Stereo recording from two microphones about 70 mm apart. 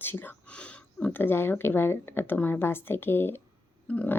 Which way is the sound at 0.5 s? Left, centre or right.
Centre.